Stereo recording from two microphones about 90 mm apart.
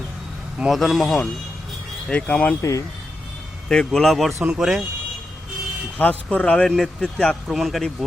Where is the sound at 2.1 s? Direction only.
10° left (ahead or behind).